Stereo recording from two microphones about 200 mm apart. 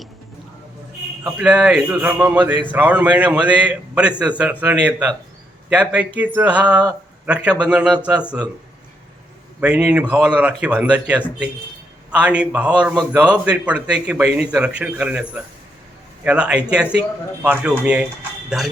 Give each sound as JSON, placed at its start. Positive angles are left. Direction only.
{"t": 1.2, "sound": "a man's voice", "side_deg": -5}
{"t": 9.6, "sound": "a man's voice", "side_deg": -5}